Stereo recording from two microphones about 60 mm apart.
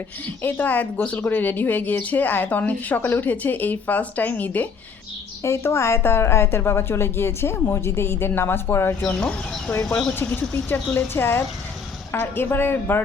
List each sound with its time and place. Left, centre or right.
0.4 s speech: left
5.4 s speech: left